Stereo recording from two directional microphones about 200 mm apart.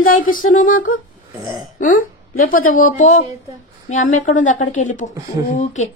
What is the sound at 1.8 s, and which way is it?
Speech, 40° left (ahead or behind).